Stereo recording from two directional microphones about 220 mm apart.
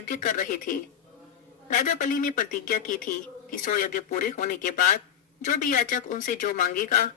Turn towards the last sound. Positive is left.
turn(degrees=35)  # may be behind; listen again after turning